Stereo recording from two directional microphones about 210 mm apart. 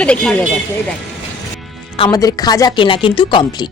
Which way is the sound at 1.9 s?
20° left (ahead or behind).